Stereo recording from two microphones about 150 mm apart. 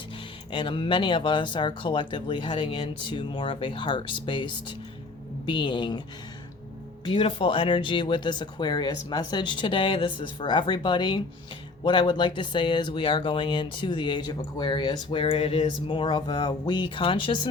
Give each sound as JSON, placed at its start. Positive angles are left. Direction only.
{"t": 0.5, "sound": "speech", "side_deg": 35}
{"t": 7.0, "sound": "speech", "side_deg": 35}